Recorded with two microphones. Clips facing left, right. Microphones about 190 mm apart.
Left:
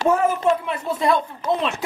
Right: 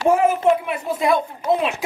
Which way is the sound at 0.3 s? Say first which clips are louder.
Right 2 dB; 15° right (ahead or behind).